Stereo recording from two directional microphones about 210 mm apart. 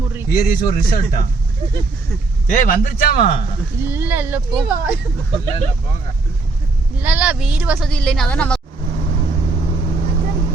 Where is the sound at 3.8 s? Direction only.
10° right (ahead or behind).